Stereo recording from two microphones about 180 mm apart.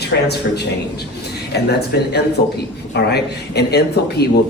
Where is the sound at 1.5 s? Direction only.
65° left (ahead or behind).